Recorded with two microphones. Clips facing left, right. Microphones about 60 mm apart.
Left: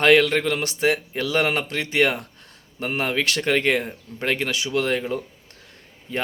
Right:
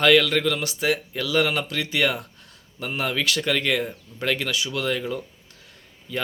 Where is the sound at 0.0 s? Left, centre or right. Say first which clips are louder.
Left 1 dB; left.